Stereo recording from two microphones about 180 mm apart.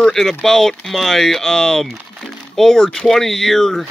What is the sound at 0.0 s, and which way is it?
Speech, centre (ahead or behind).